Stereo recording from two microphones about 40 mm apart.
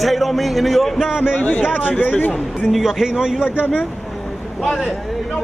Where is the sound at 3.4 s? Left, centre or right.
Left.